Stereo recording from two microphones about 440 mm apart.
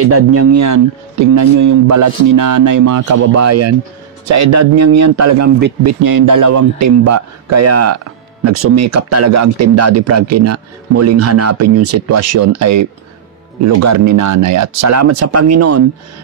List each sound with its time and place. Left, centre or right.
0.0 s speech: right